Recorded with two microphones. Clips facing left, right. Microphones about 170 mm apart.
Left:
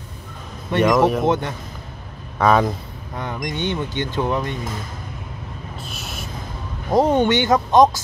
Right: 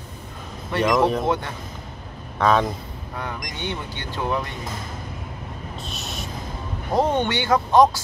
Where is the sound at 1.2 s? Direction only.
20° left (ahead or behind).